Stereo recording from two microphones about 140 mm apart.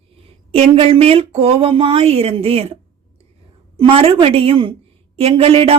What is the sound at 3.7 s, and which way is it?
A woman's voice, 40° right (ahead or behind).